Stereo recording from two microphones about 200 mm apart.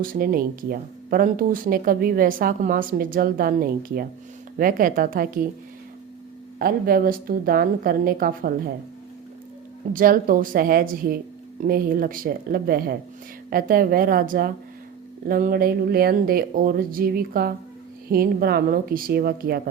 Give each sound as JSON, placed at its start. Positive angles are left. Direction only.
{"t": 0.0, "sound": "speech", "side_deg": -45}
{"t": 6.6, "sound": "speech", "side_deg": -45}
{"t": 9.9, "sound": "speech", "side_deg": -45}